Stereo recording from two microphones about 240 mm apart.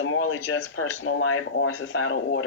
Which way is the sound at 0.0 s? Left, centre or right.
Left.